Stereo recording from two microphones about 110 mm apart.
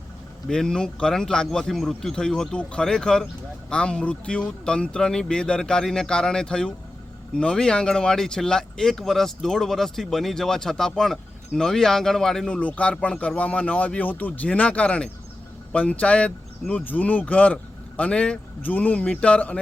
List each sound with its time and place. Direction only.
0.4 s speech: 5° left (ahead or behind)